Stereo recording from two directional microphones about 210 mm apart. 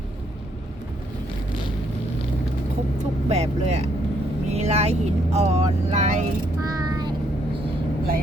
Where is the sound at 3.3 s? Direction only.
30° right (ahead or behind).